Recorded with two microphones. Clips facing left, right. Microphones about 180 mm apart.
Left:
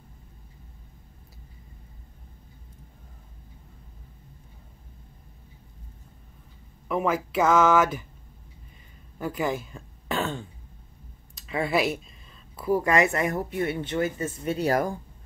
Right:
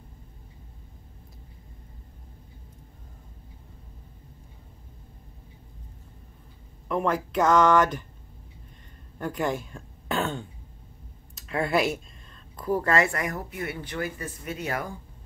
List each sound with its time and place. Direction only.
6.9 s speech: 5° left (ahead or behind)
9.2 s speech: centre (ahead or behind); by 15.0 s 40° left (ahead or behind)